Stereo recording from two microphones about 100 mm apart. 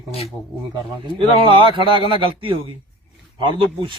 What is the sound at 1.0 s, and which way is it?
A man's voice, 60° right (ahead or behind).